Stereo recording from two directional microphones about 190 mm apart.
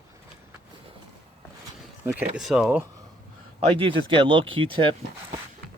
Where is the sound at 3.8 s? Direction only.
25° right (ahead or behind).